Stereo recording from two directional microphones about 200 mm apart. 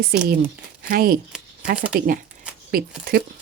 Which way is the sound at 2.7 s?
50° right (ahead or behind).